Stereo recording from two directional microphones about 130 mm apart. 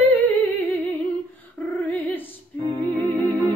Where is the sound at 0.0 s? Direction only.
15° left (ahead or behind).